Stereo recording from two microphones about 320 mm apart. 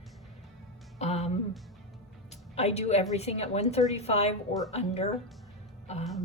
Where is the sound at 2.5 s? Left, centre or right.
Centre.